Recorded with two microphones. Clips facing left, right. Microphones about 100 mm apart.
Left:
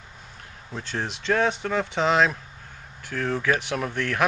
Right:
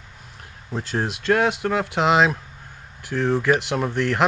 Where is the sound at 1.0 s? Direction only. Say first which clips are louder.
Right 3 dB; 5° right (ahead or behind).